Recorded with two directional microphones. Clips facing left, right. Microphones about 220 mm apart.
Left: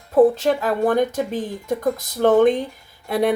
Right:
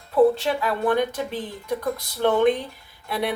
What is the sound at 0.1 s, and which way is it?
Speech, 45° left (ahead or behind).